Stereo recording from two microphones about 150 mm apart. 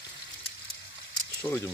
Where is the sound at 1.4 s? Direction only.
15° left (ahead or behind).